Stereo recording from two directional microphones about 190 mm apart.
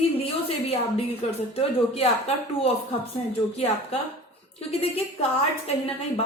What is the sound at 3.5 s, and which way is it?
A woman's voice, 35° left (ahead or behind).